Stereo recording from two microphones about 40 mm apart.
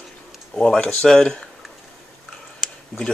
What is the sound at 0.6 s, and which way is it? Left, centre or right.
Speech, centre.